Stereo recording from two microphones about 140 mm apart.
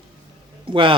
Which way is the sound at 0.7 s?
35° right (ahead or behind).